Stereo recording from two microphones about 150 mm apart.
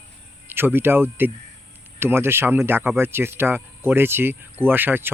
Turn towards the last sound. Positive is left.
turn(degrees=-15)  # may be behind; listen again after turning